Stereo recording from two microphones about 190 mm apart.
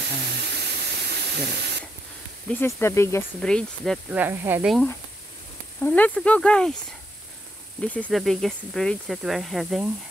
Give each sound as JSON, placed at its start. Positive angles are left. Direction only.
{"t": 0.4, "sound": "steam", "side_deg": -65}
{"t": 2.5, "sound": "speech", "side_deg": 15}
{"t": 3.3, "sound": "speech", "side_deg": 5}
{"t": 4.2, "sound": "speech", "side_deg": -10}
{"t": 5.9, "sound": "speech", "side_deg": 5}
{"t": 7.8, "sound": "speech", "side_deg": 5}